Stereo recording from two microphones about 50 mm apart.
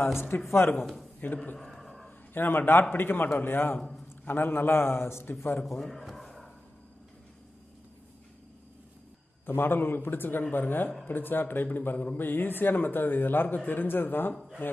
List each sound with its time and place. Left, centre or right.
0.5 s speech: left
1.2 s a man's voice: left
1.7 s a sound: centre
2.0 s a man's voice: left
5.7 s a sound: centre
9.5 s a man's voice: left